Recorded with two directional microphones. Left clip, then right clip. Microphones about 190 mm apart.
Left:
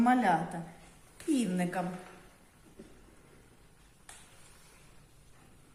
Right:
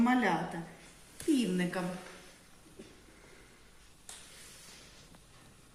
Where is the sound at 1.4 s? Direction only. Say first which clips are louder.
Even; 50° left (ahead or behind).